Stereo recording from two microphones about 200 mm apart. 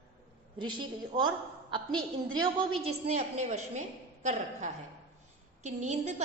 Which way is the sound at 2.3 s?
25° right (ahead or behind).